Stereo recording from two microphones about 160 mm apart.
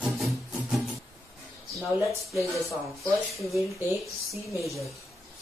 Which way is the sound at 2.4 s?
Centre (ahead or behind).